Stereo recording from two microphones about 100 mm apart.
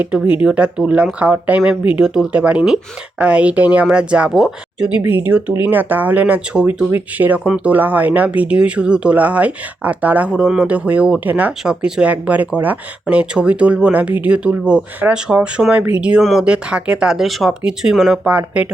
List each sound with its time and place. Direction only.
0.0 s speech: 15° right (ahead or behind)
4.9 s speech: 15° right (ahead or behind)
18.3 s speech: 15° right (ahead or behind)